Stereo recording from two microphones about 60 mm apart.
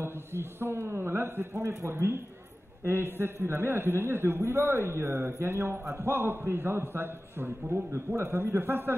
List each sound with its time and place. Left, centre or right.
0.0 s a man's voice: right